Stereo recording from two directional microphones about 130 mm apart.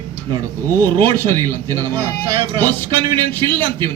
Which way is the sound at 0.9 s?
30° right (ahead or behind).